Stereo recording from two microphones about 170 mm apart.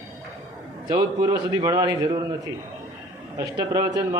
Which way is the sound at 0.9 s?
25° right (ahead or behind).